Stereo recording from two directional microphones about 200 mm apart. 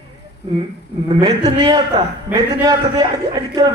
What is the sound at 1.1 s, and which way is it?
A man's voice, 20° right (ahead or behind).